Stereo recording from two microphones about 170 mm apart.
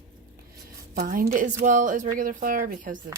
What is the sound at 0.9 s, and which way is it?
A woman's voice, 65° right (ahead or behind).